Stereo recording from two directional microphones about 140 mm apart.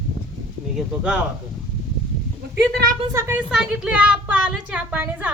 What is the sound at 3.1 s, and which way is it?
Speech, 20° right (ahead or behind).